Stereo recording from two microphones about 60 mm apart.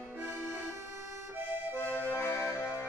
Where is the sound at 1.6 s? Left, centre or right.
Right.